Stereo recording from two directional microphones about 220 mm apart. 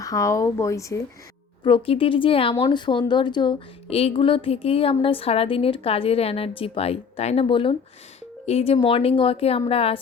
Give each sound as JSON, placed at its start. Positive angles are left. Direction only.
{"t": 0.0, "sound": "speech", "side_deg": 15}